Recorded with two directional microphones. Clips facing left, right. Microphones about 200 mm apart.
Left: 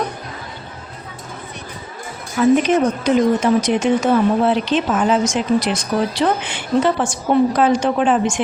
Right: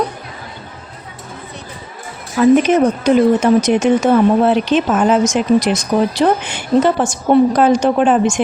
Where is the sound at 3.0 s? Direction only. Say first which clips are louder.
Right 4 dB; 45° right (ahead or behind).